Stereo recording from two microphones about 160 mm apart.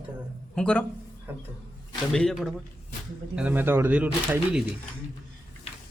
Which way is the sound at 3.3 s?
10° right (ahead or behind).